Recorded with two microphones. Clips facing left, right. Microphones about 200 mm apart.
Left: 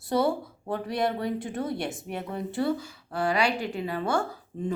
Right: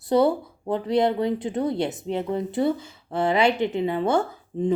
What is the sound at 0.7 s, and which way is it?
A woman's voice, 20° right (ahead or behind).